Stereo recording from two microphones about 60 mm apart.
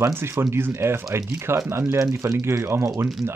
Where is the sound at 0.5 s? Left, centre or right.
Right.